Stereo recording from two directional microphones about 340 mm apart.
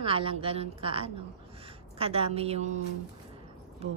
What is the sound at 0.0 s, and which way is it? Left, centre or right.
A woman's voice, centre.